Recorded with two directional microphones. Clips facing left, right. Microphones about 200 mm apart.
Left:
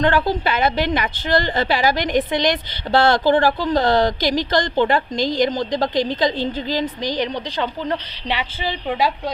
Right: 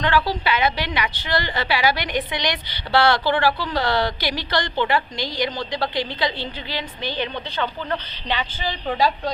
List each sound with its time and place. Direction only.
0.3 s a woman's voice: 50° left (ahead or behind); by 7.9 s 35° left (ahead or behind)